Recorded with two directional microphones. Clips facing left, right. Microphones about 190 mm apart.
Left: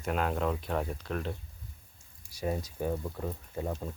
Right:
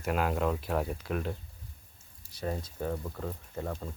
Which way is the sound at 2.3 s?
10° left (ahead or behind).